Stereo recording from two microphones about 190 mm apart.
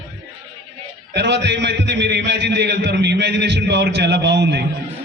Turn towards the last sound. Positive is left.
turn(degrees=-65)  # may be behind; listen again after turning